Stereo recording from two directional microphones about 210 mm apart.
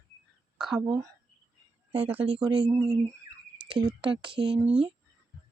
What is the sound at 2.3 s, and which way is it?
Speech, 20° right (ahead or behind).